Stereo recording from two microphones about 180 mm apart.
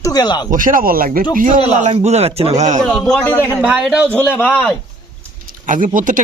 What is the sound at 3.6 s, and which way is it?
Speech, 5° right (ahead or behind).